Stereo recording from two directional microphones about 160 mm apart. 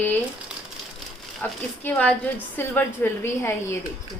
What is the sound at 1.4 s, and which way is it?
A woman's voice, 10° left (ahead or behind).